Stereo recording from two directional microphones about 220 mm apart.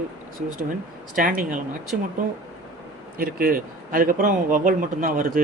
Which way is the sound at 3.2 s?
40° right (ahead or behind).